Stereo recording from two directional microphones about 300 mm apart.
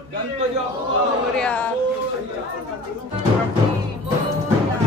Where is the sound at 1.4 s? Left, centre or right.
Centre.